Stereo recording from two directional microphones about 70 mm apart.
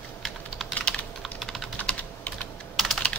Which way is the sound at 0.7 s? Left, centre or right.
Left.